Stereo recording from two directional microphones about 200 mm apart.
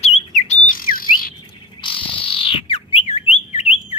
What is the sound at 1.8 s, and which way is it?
Bird, 25° left (ahead or behind).